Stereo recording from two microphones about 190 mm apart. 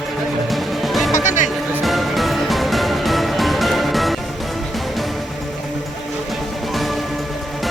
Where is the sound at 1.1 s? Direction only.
40° left (ahead or behind).